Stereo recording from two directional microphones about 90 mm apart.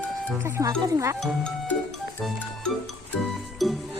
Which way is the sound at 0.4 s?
30° right (ahead or behind).